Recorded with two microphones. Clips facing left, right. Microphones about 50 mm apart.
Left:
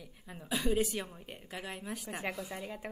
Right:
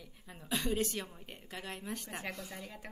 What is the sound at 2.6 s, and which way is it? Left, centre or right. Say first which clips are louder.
Speech: left 5 dB; centre.